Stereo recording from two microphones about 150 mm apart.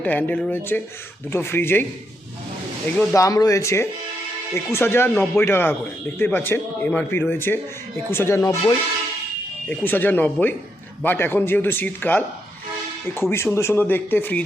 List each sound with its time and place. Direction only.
0.0 s speech: 10° left (ahead or behind)
3.2 s speech: 25° left (ahead or behind)
13.3 s speech: 15° left (ahead or behind)